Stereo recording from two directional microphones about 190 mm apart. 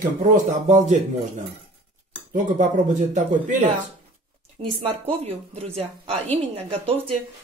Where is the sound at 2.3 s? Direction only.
40° right (ahead or behind).